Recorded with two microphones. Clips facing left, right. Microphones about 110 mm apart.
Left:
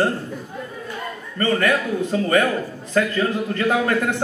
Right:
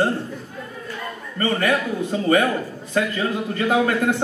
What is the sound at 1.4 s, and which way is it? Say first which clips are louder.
A man's voice: left 1 dB; 15° right (ahead or behind).